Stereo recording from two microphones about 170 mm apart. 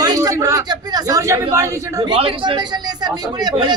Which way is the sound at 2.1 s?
30° right (ahead or behind).